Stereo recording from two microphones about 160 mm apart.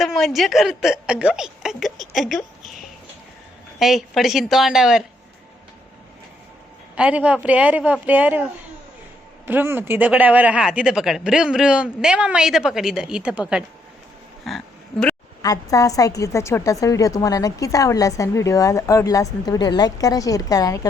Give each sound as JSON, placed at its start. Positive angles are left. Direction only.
{"t": 0.0, "sound": "a woman's voice", "side_deg": 0}
{"t": 6.9, "sound": "speech", "side_deg": -10}
{"t": 9.5, "sound": "speech", "side_deg": -15}
{"t": 14.4, "sound": "a sound", "side_deg": 0}
{"t": 15.4, "sound": "a woman's voice", "side_deg": 20}